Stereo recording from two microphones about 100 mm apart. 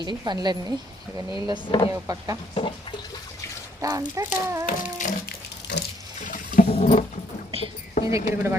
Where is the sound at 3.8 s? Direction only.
35° right (ahead or behind).